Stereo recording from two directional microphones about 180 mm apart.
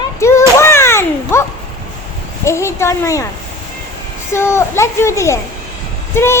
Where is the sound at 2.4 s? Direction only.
15° left (ahead or behind).